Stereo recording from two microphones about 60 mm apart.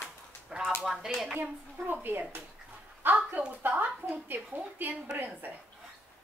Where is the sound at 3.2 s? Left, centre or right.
Right.